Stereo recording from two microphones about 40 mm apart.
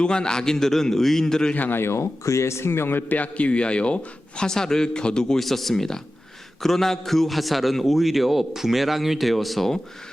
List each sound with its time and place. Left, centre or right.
0.0 s a man's voice: centre
1.7 s a man's voice: left
3.1 s a man's voice: left
4.4 s a man's voice: centre
5.4 s a man's voice: centre